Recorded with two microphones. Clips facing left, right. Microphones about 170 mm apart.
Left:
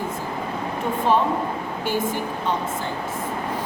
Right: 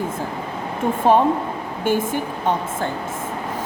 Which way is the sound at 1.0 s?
50° right (ahead or behind).